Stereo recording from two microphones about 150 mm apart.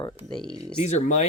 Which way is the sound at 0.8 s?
50° left (ahead or behind).